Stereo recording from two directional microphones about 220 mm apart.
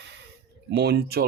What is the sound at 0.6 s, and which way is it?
Speech, 50° right (ahead or behind).